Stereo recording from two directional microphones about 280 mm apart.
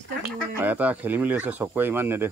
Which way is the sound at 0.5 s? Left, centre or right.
Centre.